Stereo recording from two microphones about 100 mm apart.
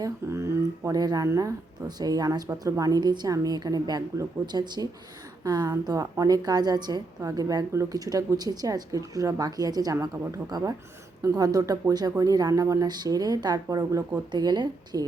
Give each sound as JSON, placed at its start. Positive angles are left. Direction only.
{"t": 0.0, "sound": "a woman's voice", "side_deg": -30}